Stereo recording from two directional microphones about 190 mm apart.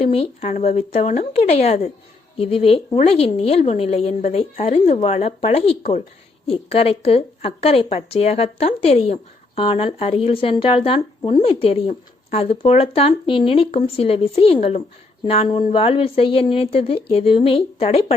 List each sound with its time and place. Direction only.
0.0 s a woman's voice: 30° left (ahead or behind)